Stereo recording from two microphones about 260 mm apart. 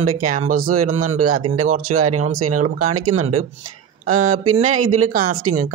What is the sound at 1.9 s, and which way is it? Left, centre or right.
Speech, right.